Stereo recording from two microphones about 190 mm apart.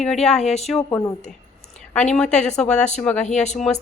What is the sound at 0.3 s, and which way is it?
Speech, 35° left (ahead or behind).